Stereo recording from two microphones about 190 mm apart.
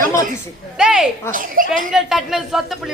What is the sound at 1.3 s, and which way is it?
Speech, 45° right (ahead or behind).